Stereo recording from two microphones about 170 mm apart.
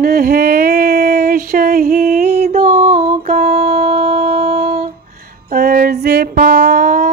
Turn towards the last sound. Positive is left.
turn(degrees=-65)  # may be behind; listen again after turning